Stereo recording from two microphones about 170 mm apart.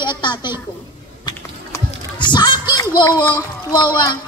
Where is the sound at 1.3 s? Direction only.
25° left (ahead or behind).